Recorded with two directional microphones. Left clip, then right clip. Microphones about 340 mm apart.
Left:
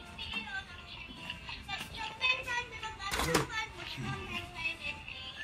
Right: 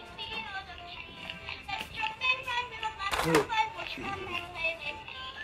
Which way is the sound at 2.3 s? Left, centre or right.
Centre.